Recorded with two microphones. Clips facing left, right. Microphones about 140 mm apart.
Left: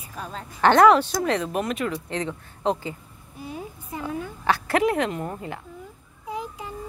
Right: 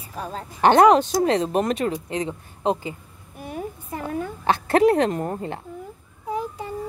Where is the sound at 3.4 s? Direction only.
55° right (ahead or behind).